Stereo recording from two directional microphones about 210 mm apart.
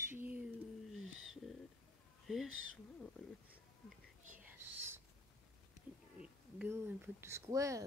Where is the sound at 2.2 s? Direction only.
Centre (ahead or behind).